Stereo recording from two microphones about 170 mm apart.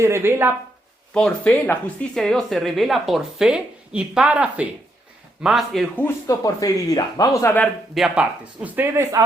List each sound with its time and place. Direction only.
0.0 s speech: 15° right (ahead or behind)
1.1 s speech: 5° left (ahead or behind)
6.0 s speech: 15° left (ahead or behind)
7.9 s speech: 5° right (ahead or behind)